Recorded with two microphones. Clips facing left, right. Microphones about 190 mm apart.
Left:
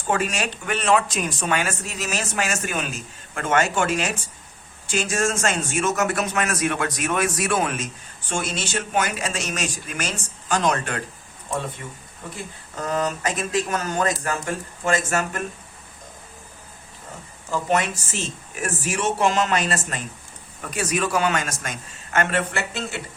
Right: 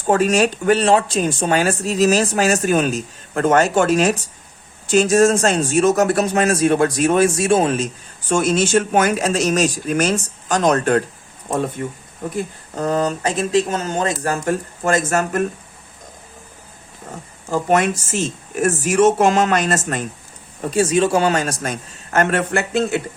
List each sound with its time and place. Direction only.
0.1 s speech: 40° right (ahead or behind)
8.3 s speech: 45° right (ahead or behind)
11.8 s speech: 55° right (ahead or behind)
12.7 s speech: 35° right (ahead or behind)
14.3 s speech: 40° right (ahead or behind)
17.5 s speech: 50° right (ahead or behind)
20.6 s speech: 30° right (ahead or behind); by 23.0 s 50° right (ahead or behind)